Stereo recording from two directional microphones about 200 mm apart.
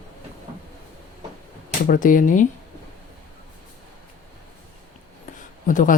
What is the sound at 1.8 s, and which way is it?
Speech, 40° left (ahead or behind).